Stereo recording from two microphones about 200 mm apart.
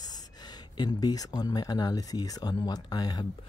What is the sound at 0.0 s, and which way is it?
Speech, 20° left (ahead or behind).